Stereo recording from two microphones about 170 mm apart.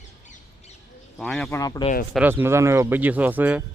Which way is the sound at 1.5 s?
20° left (ahead or behind).